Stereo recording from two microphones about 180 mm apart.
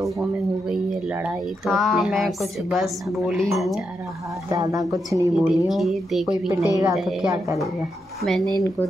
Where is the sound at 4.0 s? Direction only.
15° right (ahead or behind).